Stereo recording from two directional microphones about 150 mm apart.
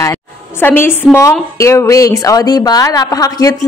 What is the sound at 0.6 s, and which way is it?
A woman's voice, 15° left (ahead or behind).